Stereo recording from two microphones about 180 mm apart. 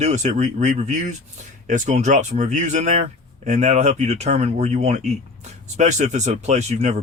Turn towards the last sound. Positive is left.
turn(degrees=-40)  # may be behind; listen again after turning